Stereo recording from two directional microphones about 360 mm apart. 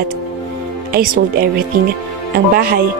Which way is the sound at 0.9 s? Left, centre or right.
Right.